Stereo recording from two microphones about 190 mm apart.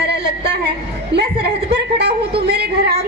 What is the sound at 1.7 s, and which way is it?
Speech, 60° right (ahead or behind).